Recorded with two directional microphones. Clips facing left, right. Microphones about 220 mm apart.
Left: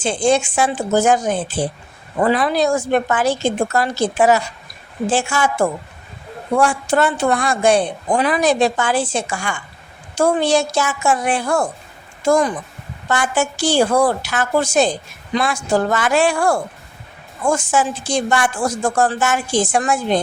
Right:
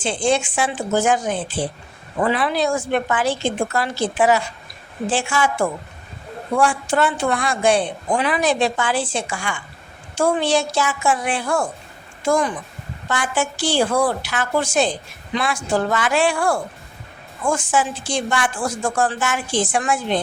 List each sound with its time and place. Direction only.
0.0 s a woman's voice: 45° left (ahead or behind)